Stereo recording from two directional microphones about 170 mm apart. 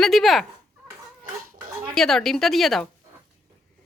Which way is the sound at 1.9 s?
Centre (ahead or behind).